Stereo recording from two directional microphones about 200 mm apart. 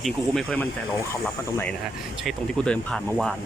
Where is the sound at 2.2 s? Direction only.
Centre (ahead or behind).